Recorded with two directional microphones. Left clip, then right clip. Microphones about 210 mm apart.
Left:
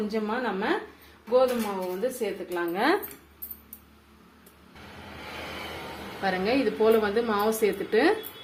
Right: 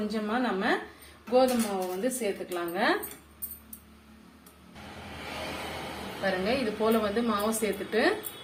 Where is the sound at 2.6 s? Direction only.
40° left (ahead or behind).